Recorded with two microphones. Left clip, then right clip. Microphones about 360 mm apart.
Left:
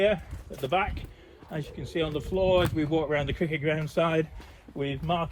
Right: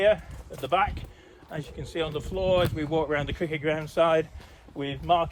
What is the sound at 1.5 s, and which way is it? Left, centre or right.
Speech, centre.